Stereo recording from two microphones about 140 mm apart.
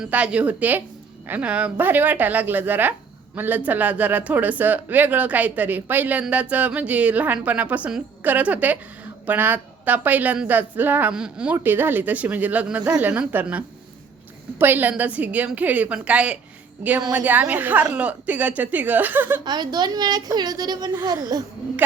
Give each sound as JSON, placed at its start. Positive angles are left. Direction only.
{"t": 0.0, "sound": "speech", "side_deg": -10}
{"t": 19.5, "sound": "a woman's voice", "side_deg": -30}